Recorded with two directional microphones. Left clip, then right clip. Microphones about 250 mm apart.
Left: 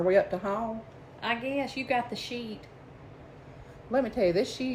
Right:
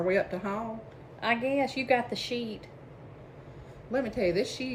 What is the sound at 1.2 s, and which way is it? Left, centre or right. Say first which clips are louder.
A woman's voice: right 3 dB; centre.